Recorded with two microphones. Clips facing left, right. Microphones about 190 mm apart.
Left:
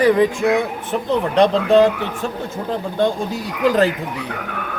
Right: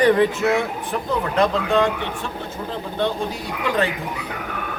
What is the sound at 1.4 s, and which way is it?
Speech, 35° left (ahead or behind).